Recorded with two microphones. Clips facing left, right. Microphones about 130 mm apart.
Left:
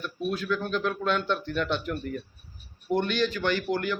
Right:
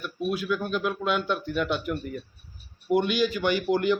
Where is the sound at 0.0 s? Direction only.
10° right (ahead or behind).